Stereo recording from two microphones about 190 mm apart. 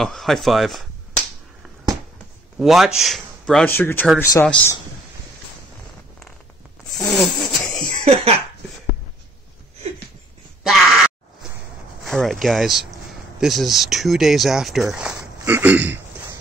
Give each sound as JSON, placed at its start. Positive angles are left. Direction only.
{"t": 0.0, "sound": "finger snapping", "side_deg": 0}
{"t": 2.6, "sound": "speech", "side_deg": 0}
{"t": 6.9, "sound": "a sound", "side_deg": 0}
{"t": 8.0, "sound": "speech", "side_deg": -30}
{"t": 12.0, "sound": "speech", "side_deg": 0}